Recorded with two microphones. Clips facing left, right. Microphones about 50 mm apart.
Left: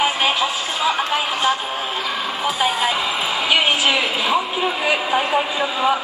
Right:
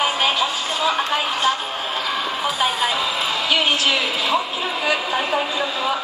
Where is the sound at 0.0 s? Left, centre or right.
Centre.